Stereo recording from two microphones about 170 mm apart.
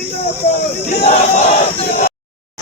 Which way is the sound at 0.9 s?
45° left (ahead or behind).